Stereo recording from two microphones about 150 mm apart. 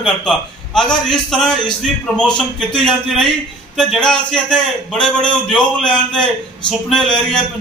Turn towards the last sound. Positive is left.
turn(degrees=5)  # may be behind; listen again after turning